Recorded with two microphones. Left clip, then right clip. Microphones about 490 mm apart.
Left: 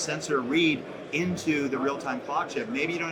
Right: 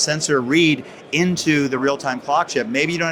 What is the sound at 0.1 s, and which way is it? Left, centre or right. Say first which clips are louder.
Speech: right 9 dB; right.